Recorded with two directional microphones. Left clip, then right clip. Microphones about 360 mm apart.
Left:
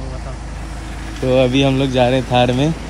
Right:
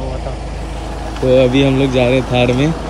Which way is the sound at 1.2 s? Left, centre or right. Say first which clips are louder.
Right 3 dB; centre.